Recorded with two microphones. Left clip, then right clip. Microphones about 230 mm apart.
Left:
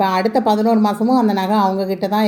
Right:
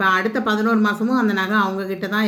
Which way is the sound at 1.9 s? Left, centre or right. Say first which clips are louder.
Left 4 dB; centre.